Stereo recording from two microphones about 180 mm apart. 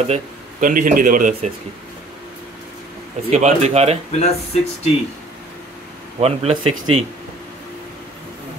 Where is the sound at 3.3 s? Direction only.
40° right (ahead or behind).